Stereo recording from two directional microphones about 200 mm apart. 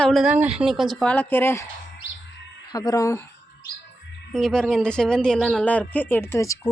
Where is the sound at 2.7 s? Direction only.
20° left (ahead or behind).